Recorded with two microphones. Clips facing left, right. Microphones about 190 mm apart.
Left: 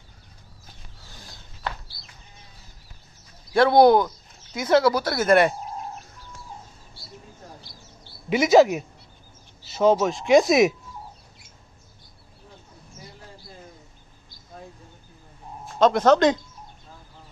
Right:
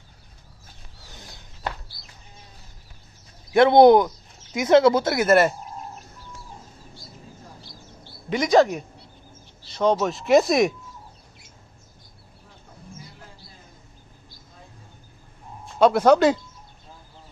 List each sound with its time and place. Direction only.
1.0 s a sound: 20° right (ahead or behind)
3.5 s speech: 20° right (ahead or behind)
5.2 s speech: 5° right (ahead or behind)
8.3 s speech: 5° left (ahead or behind)
15.8 s speech: 10° right (ahead or behind)